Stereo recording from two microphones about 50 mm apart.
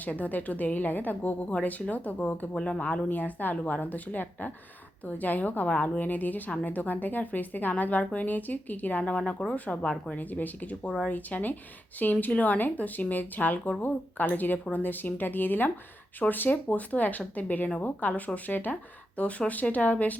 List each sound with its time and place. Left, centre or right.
0.0 s a woman's voice: left
10.2 s a woman's voice: left
10.8 s speech: centre
11.1 s a woman's voice: left